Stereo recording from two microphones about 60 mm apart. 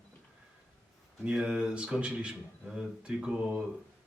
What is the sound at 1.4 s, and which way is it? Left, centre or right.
A man's voice, centre.